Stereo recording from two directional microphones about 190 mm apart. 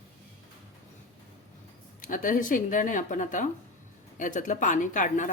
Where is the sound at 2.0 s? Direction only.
45° left (ahead or behind).